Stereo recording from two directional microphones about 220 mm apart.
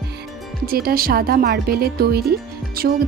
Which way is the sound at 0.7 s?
40° right (ahead or behind).